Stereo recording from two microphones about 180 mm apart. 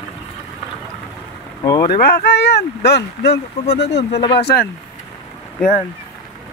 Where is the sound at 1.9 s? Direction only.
60° left (ahead or behind).